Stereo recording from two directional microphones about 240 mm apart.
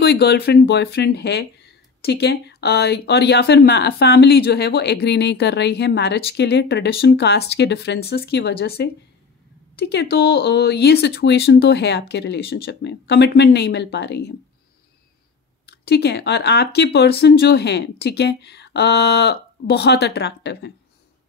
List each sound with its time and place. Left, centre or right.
0.0 s speech: left
15.6 s speech: left